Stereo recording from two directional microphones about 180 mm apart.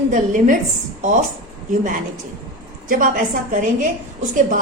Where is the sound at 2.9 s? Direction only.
50° right (ahead or behind).